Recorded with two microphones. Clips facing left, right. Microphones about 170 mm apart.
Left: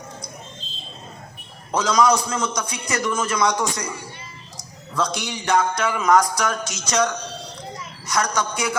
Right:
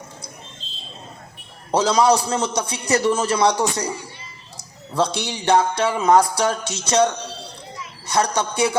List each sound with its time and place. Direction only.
1.7 s a man's voice: 30° right (ahead or behind)
4.9 s a man's voice: 30° right (ahead or behind)